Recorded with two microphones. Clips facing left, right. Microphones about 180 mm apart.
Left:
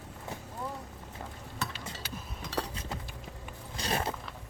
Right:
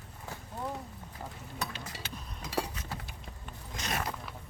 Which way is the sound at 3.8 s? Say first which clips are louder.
Left 3 dB; 30° left (ahead or behind).